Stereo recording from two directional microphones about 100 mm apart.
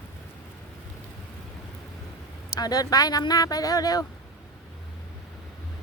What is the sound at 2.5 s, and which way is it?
Speech, 40° left (ahead or behind).